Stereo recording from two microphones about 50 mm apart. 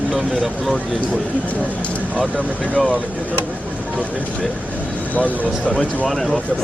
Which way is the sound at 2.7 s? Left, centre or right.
Centre.